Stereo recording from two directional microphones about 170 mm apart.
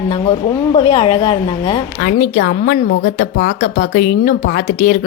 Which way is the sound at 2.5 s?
50° left (ahead or behind).